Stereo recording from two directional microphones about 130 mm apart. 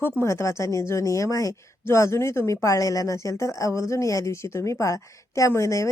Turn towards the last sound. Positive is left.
turn(degrees=20)  # may be behind; listen again after turning